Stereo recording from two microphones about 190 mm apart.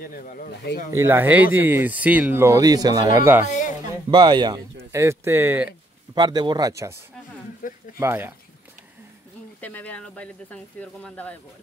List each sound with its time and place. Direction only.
0.0 s speech: 45° left (ahead or behind)
0.9 s speech: 10° right (ahead or behind)
3.4 s music: 40° left (ahead or behind)
4.1 s speech: 25° right (ahead or behind)
6.1 s speech: 20° right (ahead or behind)
7.6 s a sound: 45° left (ahead or behind)
8.0 s speech: 10° right (ahead or behind)
9.6 s speech: 10° left (ahead or behind)